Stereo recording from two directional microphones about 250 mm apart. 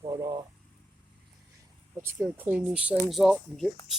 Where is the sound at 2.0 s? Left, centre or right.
Centre.